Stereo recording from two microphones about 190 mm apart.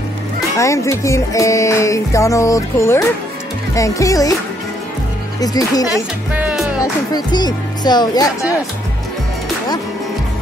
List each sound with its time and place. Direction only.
0.6 s music: 15° left (ahead or behind)
5.4 s speech: 20° left (ahead or behind)
6.3 s music: 5° right (ahead or behind)
6.8 s speech: 20° left (ahead or behind)